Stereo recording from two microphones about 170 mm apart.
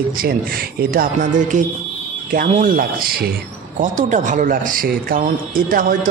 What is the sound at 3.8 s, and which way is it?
A man's voice, 45° right (ahead or behind).